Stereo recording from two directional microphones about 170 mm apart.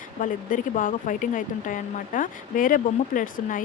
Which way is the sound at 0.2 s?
50° left (ahead or behind).